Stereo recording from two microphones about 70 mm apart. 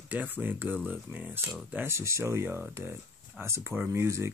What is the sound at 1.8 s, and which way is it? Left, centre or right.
Speech, right.